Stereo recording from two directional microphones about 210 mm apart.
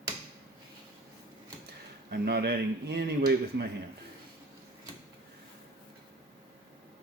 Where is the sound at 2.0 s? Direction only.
50° right (ahead or behind).